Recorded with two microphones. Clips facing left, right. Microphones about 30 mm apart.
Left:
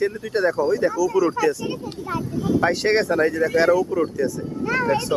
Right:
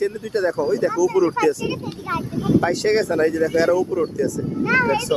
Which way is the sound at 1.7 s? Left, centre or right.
Right.